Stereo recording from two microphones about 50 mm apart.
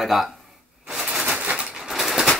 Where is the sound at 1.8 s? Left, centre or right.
Centre.